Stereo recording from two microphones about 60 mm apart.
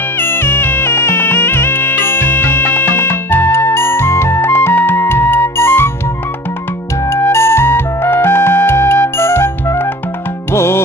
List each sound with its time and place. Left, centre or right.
0.2 s music: left
7.1 s music: left